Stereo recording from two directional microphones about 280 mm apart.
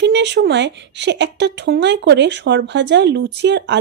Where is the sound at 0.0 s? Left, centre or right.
Right.